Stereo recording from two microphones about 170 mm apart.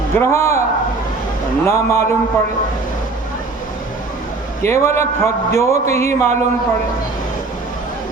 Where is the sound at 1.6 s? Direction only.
15° left (ahead or behind).